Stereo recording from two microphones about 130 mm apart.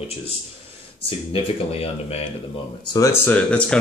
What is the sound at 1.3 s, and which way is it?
Speech, 50° left (ahead or behind).